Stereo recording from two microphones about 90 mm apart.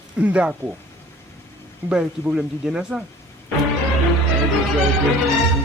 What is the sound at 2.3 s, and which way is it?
Speech, 5° right (ahead or behind).